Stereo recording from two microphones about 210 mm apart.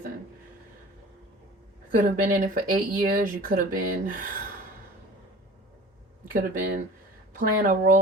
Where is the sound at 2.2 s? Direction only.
40° right (ahead or behind).